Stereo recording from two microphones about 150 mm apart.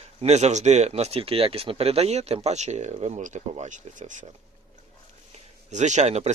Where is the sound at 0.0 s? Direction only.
45° right (ahead or behind).